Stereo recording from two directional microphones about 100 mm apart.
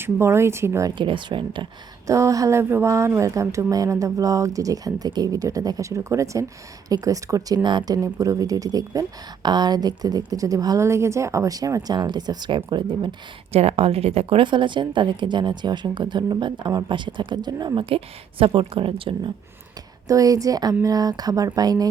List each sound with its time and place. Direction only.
0.0 s a sound: 25° right (ahead or behind)
0.9 s a woman's voice: 55° right (ahead or behind)
2.0 s a sound: 35° right (ahead or behind)
3.2 s speech: 30° right (ahead or behind); by 7.9 s 45° right (ahead or behind)
8.0 s speech: 35° right (ahead or behind)
10.8 s speech: 30° right (ahead or behind); by 13.1 s 50° right (ahead or behind)
13.5 s a woman's voice: 90° right; by 17.7 s 45° right (ahead or behind)
17.7 s a woman's voice: 65° right (ahead or behind)
20.1 s speech: 35° right (ahead or behind)